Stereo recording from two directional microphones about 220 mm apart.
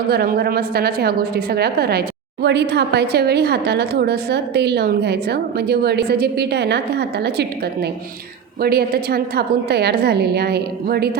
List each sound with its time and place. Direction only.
0.1 s a woman's voice: 45° right (ahead or behind)